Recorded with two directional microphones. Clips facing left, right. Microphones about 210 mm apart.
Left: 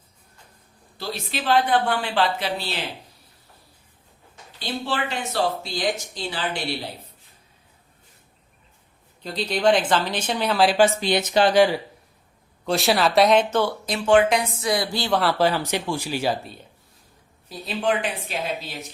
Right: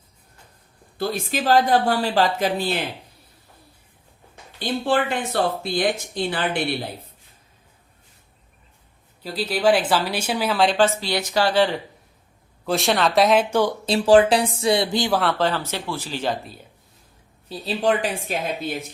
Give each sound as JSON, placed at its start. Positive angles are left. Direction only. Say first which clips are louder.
{"t": 0.9, "sound": "speech", "louder": "right 6 dB", "side_deg": -50}
{"t": 4.6, "sound": "speech", "louder": "right 6 dB", "side_deg": -50}
{"t": 9.2, "sound": "speech", "louder": "right 1 dB", "side_deg": -5}
{"t": 12.6, "sound": "speech", "louder": "even", "side_deg": 0}
{"t": 13.8, "sound": "speech", "louder": "right 4 dB", "side_deg": -30}
{"t": 15.1, "sound": "speech", "louder": "left 1 dB", "side_deg": 0}
{"t": 17.5, "sound": "speech", "louder": "right 3 dB", "side_deg": -35}